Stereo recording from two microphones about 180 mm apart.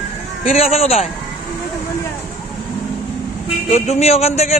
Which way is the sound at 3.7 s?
35° left (ahead or behind).